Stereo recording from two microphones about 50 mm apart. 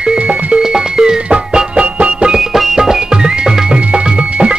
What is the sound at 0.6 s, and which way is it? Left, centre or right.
Music, centre.